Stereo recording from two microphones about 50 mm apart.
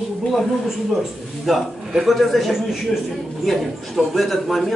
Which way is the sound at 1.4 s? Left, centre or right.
Centre.